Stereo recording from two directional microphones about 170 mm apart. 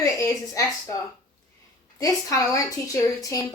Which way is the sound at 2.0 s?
20° left (ahead or behind).